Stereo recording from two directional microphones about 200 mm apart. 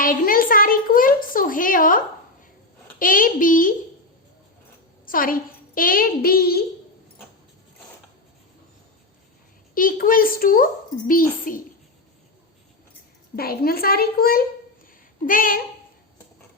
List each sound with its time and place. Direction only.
0.0 s a child's voice: 45° left (ahead or behind)
3.0 s a child's voice: 45° left (ahead or behind)
5.0 s a child's voice: 45° left (ahead or behind)
9.7 s a child's voice: 45° left (ahead or behind)
13.3 s a child's voice: 50° left (ahead or behind)